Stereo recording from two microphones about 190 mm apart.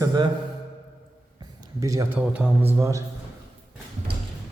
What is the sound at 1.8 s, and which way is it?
A man's voice, 15° right (ahead or behind).